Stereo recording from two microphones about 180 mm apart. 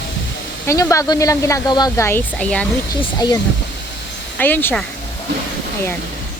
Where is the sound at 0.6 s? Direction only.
15° left (ahead or behind).